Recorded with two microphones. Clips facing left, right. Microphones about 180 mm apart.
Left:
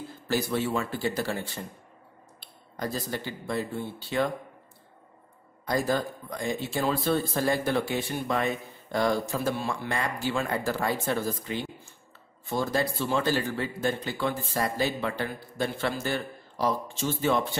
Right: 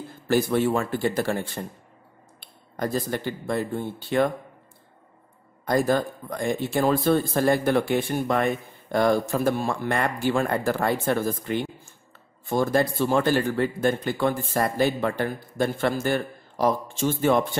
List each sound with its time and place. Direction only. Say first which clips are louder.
0.3 s speech: right 6 dB; 55° right (ahead or behind)
5.7 s speech: right 5 dB; 55° right (ahead or behind)